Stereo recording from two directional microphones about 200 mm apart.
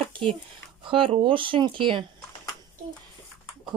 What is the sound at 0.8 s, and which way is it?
Speech, 25° right (ahead or behind).